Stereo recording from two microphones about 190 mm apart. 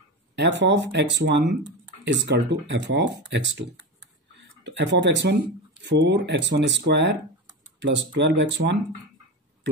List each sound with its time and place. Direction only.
0.4 s speech: 70° right (ahead or behind)